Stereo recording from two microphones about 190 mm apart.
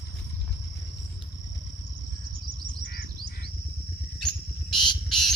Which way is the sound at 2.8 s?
50° left (ahead or behind).